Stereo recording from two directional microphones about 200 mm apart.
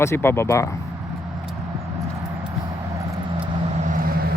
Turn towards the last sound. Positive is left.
turn(degrees=-45)  # may be behind; listen again after turning